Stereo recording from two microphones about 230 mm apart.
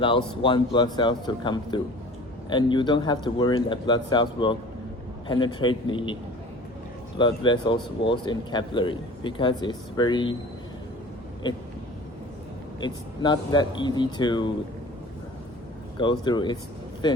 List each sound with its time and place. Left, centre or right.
0.0 s speech: left
7.2 s speech: left
11.4 s speech: centre
12.8 s speech: centre
16.2 s speech: centre